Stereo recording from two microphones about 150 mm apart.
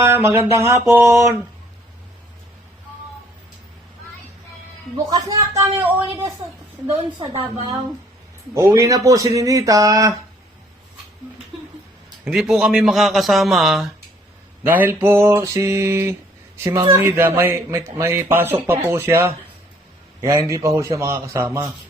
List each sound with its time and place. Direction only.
0.0 s speech: 15° right (ahead or behind)
5.0 s speech: 25° right (ahead or behind)
8.5 s speech: 20° right (ahead or behind)
12.2 s a man's voice: 5° right (ahead or behind)
14.6 s speech: 15° right (ahead or behind)